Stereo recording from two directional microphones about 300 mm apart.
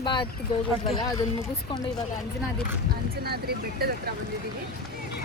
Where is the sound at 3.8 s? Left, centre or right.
Right.